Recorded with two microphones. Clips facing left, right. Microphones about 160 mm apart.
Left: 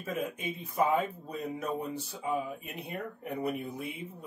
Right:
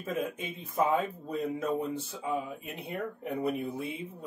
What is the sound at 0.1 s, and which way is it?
Speech, 25° right (ahead or behind).